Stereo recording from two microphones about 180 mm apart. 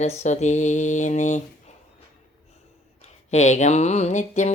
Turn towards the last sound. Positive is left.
turn(degrees=40)  # may be behind; listen again after turning